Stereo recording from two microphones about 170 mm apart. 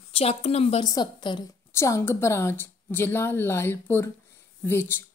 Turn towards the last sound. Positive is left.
turn(degrees=15)  # may be behind; listen again after turning